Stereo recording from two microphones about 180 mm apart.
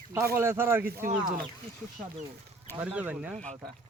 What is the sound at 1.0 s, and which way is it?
Speech, 50° right (ahead or behind).